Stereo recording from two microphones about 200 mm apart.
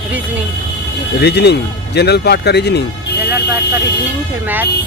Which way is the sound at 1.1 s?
55° left (ahead or behind).